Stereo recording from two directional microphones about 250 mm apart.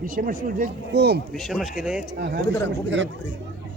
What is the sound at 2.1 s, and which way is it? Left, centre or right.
Speech, right.